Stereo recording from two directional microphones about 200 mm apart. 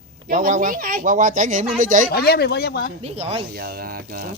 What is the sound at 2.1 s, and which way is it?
Speech, 50° left (ahead or behind).